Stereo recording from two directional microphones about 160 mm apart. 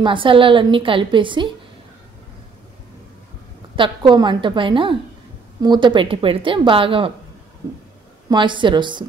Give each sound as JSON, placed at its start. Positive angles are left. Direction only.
{"t": 0.0, "sound": "a woman's voice", "side_deg": -30}
{"t": 3.7, "sound": "a woman's voice", "side_deg": -30}
{"t": 8.3, "sound": "a woman's voice", "side_deg": -30}